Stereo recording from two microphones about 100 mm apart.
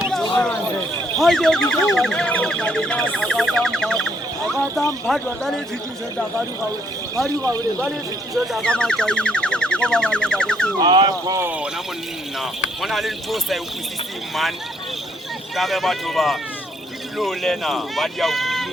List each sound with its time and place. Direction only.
1.1 s speech: 5° left (ahead or behind)
8.6 s music: 10° left (ahead or behind)
10.8 s speech: 45° right (ahead or behind)
11.3 s speech: 20° right (ahead or behind)
12.4 s speech: centre (ahead or behind)
15.5 s speech: centre (ahead or behind)